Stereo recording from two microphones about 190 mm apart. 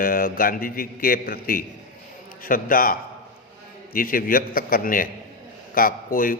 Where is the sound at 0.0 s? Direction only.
50° left (ahead or behind).